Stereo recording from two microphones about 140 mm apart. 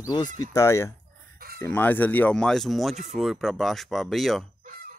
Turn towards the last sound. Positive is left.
turn(degrees=0)  # may be behind; listen again after turning